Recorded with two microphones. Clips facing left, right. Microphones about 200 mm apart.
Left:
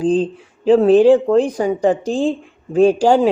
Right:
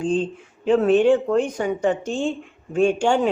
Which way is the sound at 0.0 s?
35° left (ahead or behind).